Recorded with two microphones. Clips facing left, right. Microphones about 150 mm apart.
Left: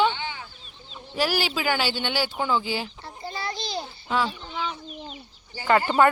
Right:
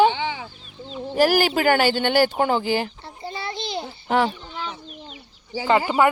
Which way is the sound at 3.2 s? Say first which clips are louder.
Right 2 dB; 25° right (ahead or behind).